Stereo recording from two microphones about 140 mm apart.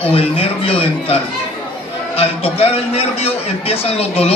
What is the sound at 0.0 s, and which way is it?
Speech, 45° left (ahead or behind).